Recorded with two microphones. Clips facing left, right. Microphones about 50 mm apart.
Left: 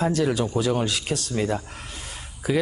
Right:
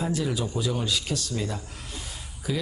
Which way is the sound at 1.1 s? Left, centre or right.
Left.